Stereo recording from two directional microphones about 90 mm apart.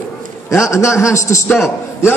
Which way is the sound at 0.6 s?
35° left (ahead or behind).